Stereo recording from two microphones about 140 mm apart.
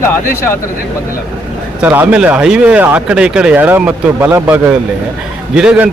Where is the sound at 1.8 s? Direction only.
10° right (ahead or behind).